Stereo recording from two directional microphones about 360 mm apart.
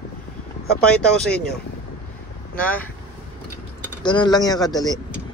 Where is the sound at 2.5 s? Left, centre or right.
Centre.